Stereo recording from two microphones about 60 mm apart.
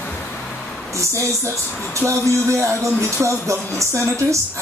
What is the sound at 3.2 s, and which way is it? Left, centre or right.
Music, right.